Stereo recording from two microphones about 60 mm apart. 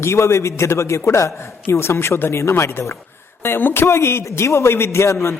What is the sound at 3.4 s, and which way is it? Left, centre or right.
Speech, left.